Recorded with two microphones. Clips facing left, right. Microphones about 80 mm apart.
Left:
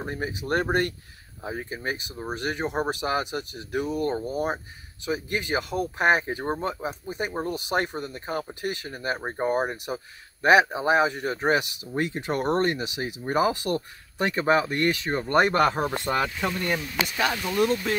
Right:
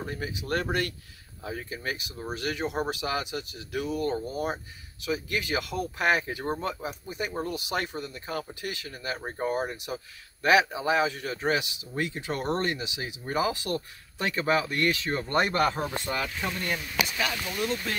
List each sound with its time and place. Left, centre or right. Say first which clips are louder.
0.0 s speech: left 3 dB; left
15.3 s speech: left 5 dB; left
16.3 s speech: left 4 dB; left